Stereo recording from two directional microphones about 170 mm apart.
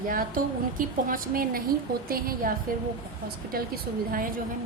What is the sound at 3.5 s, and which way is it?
Speech, 60° right (ahead or behind).